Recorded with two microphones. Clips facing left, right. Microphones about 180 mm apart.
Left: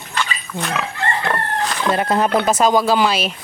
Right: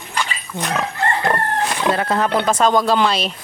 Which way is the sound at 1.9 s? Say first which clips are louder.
Left 3 dB; 15° left (ahead or behind).